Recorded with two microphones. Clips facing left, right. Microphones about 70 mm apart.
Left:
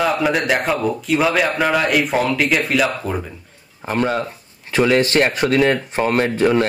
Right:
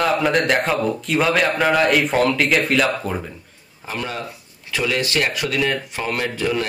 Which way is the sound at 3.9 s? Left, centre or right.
Left.